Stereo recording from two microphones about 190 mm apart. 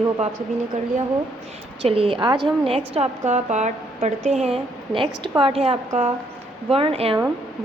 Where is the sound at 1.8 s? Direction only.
30° right (ahead or behind).